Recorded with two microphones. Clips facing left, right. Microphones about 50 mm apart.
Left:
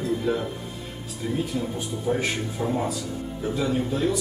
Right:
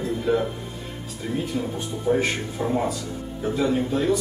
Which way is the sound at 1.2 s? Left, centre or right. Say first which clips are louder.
Even; centre.